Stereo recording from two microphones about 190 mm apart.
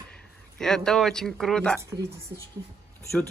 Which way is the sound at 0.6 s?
5° left (ahead or behind).